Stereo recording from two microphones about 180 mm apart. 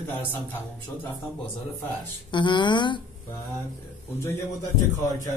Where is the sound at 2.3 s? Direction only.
25° left (ahead or behind).